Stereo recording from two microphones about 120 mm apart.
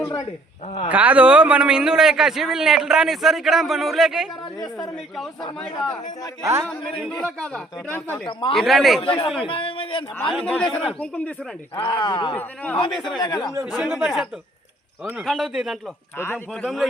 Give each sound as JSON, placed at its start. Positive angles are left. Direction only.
{"t": 0.0, "sound": "a man's voice", "side_deg": 25}
{"t": 0.9, "sound": "speech", "side_deg": -15}
{"t": 6.4, "sound": "a man's voice", "side_deg": -25}
{"t": 7.2, "sound": "a man's voice", "side_deg": 5}
{"t": 8.3, "sound": "speech", "side_deg": 40}
{"t": 8.5, "sound": "speech", "side_deg": 0}
{"t": 9.0, "sound": "a man's voice", "side_deg": 50}
{"t": 10.4, "sound": "a man's voice", "side_deg": 10}
{"t": 11.8, "sound": "speech", "side_deg": 40}
{"t": 12.3, "sound": "a man's voice", "side_deg": 10}
{"t": 13.1, "sound": "speech", "side_deg": 35}
{"t": 13.7, "sound": "speech", "side_deg": 0}
{"t": 16.1, "sound": "a man's voice", "side_deg": 20}
{"t": 16.6, "sound": "speech", "side_deg": 0}